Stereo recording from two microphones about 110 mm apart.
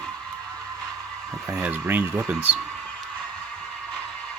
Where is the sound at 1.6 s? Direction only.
20° right (ahead or behind).